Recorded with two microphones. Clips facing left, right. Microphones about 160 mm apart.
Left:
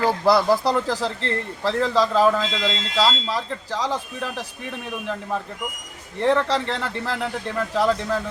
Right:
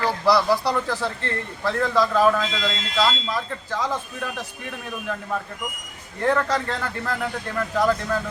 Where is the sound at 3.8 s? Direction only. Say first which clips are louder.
Left 1 dB; 30° left (ahead or behind).